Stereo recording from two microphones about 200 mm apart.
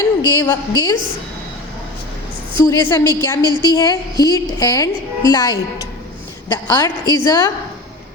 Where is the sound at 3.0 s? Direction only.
20° right (ahead or behind).